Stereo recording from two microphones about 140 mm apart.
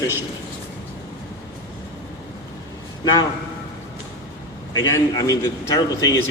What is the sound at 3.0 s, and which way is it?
Speech, 25° left (ahead or behind).